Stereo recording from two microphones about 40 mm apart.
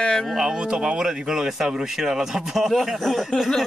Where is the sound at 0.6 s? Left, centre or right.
Right.